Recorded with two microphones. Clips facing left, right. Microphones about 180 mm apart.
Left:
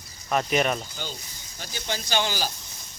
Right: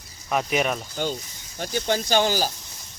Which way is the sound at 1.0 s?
55° right (ahead or behind).